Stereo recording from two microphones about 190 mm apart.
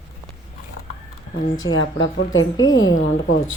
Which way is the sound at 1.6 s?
90° left.